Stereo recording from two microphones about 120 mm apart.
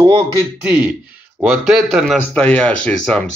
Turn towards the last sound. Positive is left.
turn(degrees=10)  # may be behind; listen again after turning